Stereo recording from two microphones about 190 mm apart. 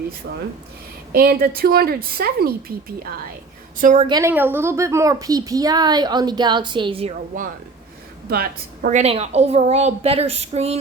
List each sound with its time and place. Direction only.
1.1 s a woman's voice: 50° right (ahead or behind)
4.0 s a woman's voice: 20° right (ahead or behind)
8.3 s a woman's voice: 50° right (ahead or behind)
9.0 s a woman's voice: 35° right (ahead or behind)